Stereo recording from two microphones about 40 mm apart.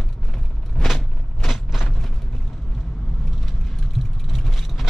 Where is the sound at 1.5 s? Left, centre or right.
Centre.